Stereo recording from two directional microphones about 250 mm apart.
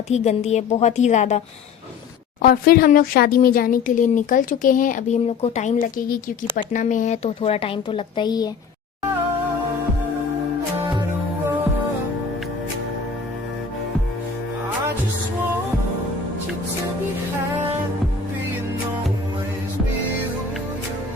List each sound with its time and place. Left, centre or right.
0.1 s a woman's voice: left
2.4 s a woman's voice: left; by 8.4 s centre